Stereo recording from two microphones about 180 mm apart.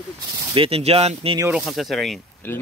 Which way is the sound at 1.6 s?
Centre (ahead or behind).